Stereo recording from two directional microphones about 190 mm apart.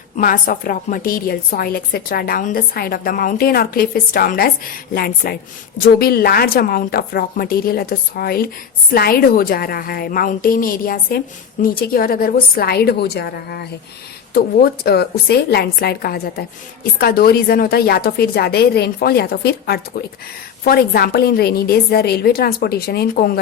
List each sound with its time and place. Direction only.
0.2 s a woman's voice: 45° left (ahead or behind)